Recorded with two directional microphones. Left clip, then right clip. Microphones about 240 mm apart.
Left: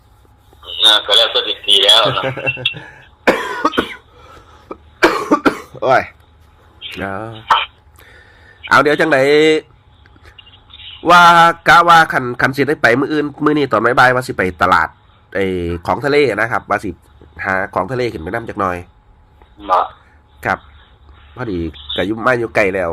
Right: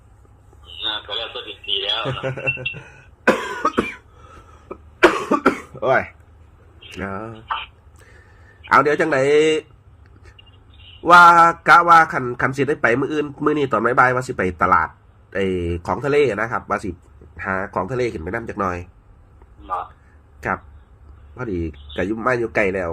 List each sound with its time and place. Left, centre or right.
0.6 s a man's voice: left
4.7 s cough: left
6.7 s throat clearing: left
8.6 s speech: left
10.2 s a sound: left
12.1 s speech: left
19.6 s a man's voice: left
21.3 s speech: left